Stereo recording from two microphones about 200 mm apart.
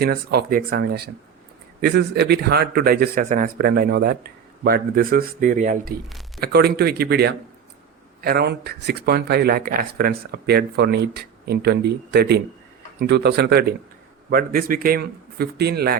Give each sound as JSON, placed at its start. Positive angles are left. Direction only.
{"t": 0.0, "sound": "speech", "side_deg": -50}
{"t": 6.1, "sound": "a sound", "side_deg": 0}
{"t": 6.4, "sound": "speech", "side_deg": -50}